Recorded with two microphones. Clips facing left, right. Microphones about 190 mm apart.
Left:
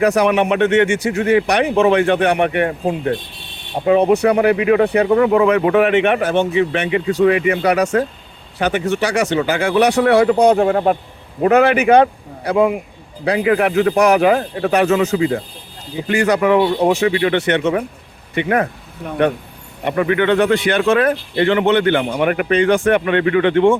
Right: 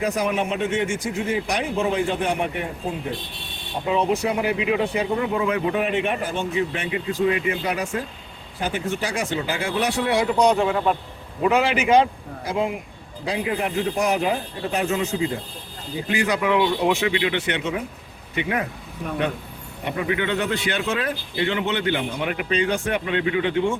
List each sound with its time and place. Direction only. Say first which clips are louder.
0.0 s speech: left 9 dB; 75° left (ahead or behind); by 12.7 s 60° left (ahead or behind)
13.2 s speech: left 9 dB; 70° left (ahead or behind)
16.0 s speech: left 7 dB; 70° left (ahead or behind)
16.4 s speech: left 6 dB; 45° left (ahead or behind)
19.8 s speech: left 8 dB; 65° left (ahead or behind); by 20.9 s 80° left
20.9 s speech: left 10 dB; 65° left (ahead or behind)